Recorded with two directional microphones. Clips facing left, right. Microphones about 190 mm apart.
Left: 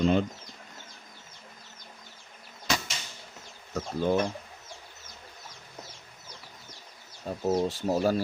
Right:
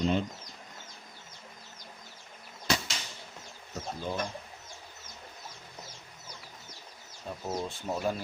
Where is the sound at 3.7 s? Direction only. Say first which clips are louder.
Left 9 dB; 70° left (ahead or behind).